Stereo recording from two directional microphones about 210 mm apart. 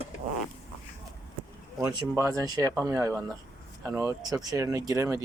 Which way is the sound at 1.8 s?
15° right (ahead or behind).